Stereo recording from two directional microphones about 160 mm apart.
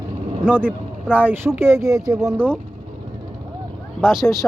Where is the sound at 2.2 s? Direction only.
5° right (ahead or behind).